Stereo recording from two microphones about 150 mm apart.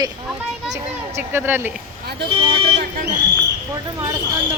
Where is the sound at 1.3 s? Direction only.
15° right (ahead or behind).